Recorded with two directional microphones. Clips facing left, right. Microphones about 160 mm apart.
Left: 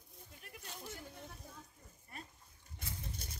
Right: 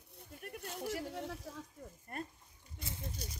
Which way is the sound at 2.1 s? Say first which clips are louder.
Right 9 dB; 55° right (ahead or behind).